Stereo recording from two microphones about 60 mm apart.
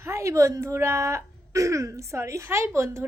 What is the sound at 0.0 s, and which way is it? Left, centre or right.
Speech, right.